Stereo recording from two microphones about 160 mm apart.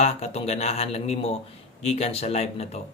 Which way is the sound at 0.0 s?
40° left (ahead or behind).